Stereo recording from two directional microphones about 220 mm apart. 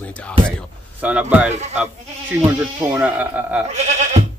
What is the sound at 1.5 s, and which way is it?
Speech, 30° right (ahead or behind).